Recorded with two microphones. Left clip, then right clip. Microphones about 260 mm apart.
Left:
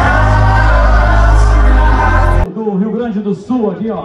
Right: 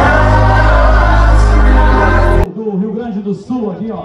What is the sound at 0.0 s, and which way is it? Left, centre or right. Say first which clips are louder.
Music: right 2 dB; centre.